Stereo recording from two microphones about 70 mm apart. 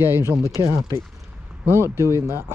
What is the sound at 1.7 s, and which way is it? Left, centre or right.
Speech, right.